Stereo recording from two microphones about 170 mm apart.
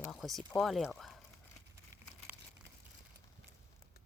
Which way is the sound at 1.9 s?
20° right (ahead or behind).